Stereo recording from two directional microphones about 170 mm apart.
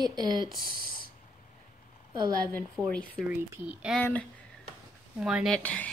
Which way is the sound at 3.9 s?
10° left (ahead or behind).